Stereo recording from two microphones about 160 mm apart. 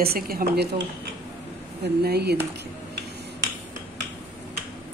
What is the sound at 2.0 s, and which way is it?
Speech, 90° right.